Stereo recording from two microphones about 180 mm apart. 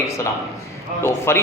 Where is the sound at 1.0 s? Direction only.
15° left (ahead or behind).